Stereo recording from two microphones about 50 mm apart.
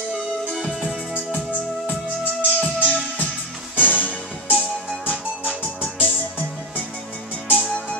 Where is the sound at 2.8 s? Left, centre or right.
Left.